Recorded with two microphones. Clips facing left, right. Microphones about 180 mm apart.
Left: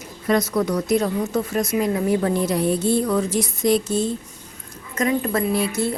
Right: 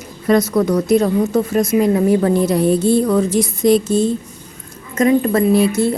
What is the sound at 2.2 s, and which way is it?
Speech, 40° right (ahead or behind).